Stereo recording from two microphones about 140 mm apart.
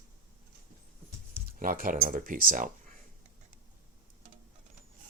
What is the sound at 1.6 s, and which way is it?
Speech, 85° right.